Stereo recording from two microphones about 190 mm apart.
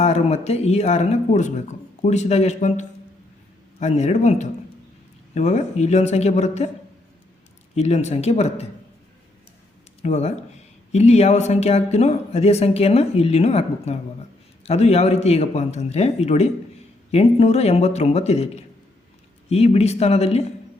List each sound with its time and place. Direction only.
0.0 s speech: 35° left (ahead or behind)
7.8 s speech: 35° left (ahead or behind)
10.0 s speech: 35° left (ahead or behind)